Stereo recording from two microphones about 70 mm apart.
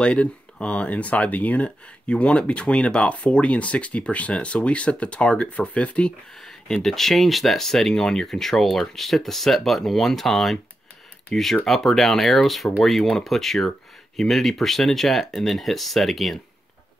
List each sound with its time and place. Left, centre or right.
0.0 s speech: centre
6.4 s speech: centre